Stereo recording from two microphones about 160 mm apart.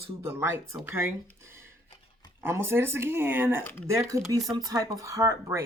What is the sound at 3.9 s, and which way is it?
Speech, 20° right (ahead or behind).